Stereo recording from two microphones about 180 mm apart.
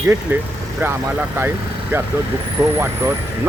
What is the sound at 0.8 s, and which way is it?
Speech, 10° right (ahead or behind).